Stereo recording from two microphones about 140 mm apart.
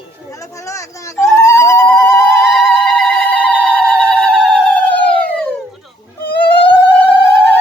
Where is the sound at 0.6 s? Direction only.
20° left (ahead or behind).